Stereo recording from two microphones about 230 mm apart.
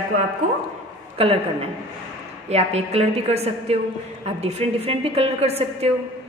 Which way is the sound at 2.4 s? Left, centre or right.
Right.